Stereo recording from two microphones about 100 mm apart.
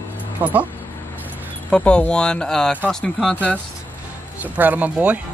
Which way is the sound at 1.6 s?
10° left (ahead or behind).